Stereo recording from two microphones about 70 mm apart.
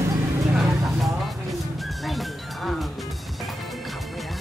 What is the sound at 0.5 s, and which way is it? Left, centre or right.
Music, centre.